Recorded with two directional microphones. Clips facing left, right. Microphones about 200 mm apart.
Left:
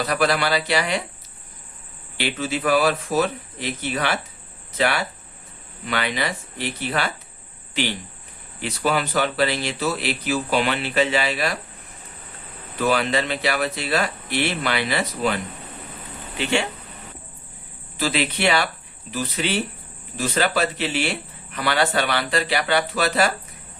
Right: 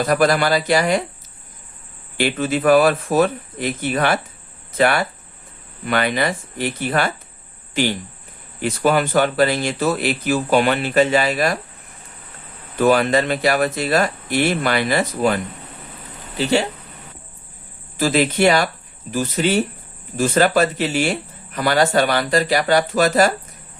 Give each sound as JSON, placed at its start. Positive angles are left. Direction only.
{"t": 0.0, "sound": "speech", "side_deg": -45}
{"t": 2.1, "sound": "speech", "side_deg": -50}
{"t": 12.8, "sound": "speech", "side_deg": -45}
{"t": 16.4, "sound": "speech", "side_deg": -35}
{"t": 17.9, "sound": "speech", "side_deg": -45}